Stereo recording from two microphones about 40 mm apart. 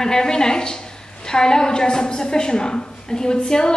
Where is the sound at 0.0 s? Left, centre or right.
Centre.